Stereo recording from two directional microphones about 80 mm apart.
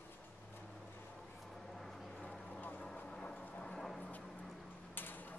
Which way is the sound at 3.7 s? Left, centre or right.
Centre.